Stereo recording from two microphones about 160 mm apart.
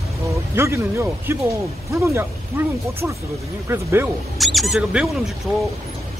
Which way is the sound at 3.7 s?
15° right (ahead or behind).